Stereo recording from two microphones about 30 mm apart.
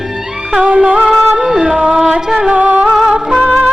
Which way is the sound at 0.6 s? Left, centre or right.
Right.